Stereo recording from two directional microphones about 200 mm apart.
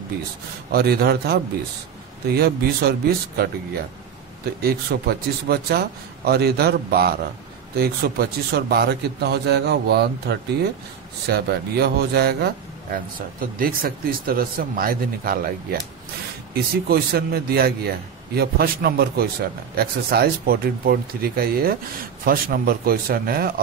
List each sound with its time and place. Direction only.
0.7 s a man's voice: 50° right (ahead or behind)
16.9 s a man's voice: 50° right (ahead or behind)